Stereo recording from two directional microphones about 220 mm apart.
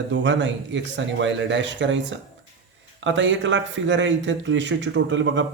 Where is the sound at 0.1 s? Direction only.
55° right (ahead or behind).